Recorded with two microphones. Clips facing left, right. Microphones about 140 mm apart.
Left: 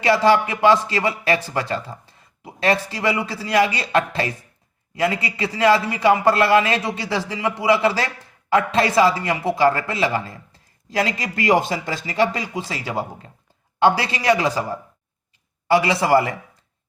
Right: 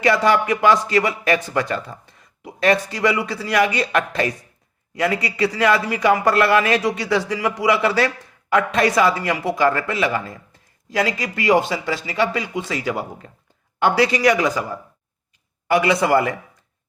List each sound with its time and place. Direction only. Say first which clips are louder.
0.0 s speech: left 1 dB; 30° left (ahead or behind)